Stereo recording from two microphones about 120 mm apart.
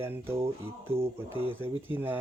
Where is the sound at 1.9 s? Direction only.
20° right (ahead or behind).